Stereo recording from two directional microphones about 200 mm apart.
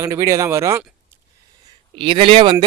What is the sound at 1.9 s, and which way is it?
Speech, 25° right (ahead or behind).